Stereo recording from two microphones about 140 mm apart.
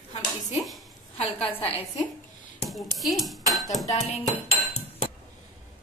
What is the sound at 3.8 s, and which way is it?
Speech, 50° left (ahead or behind).